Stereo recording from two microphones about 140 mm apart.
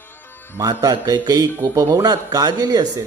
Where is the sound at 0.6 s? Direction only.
25° right (ahead or behind).